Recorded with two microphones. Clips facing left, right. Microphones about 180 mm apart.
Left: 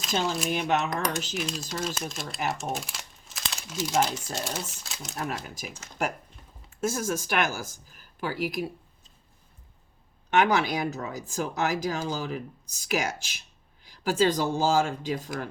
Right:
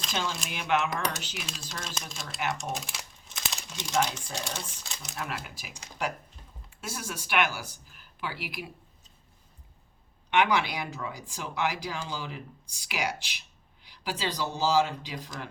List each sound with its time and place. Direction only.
0.1 s speech: 40° left (ahead or behind)
1.3 s speech: centre (ahead or behind)
2.5 s crumpling: centre (ahead or behind)
4.4 s speech: centre (ahead or behind)
5.1 s speech: 40° left (ahead or behind)
10.2 s speech: 40° left (ahead or behind)